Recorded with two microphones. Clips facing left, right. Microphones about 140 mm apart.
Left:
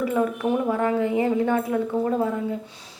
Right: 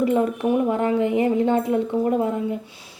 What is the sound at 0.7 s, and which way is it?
A woman's voice, 20° right (ahead or behind).